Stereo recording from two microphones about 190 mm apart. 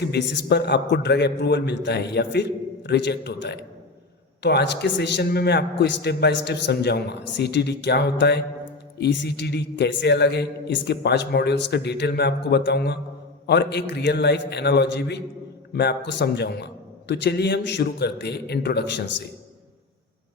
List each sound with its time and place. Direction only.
0.1 s a man's voice: 60° left (ahead or behind)